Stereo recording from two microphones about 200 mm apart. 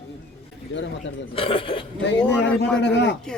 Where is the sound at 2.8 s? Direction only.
60° left (ahead or behind).